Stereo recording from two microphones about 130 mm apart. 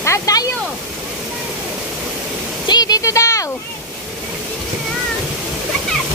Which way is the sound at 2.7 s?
30° left (ahead or behind).